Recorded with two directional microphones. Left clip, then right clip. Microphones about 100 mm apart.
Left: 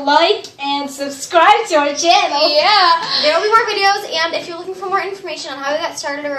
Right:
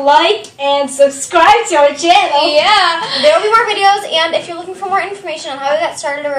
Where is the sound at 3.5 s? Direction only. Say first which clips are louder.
Right 3 dB; 5° right (ahead or behind).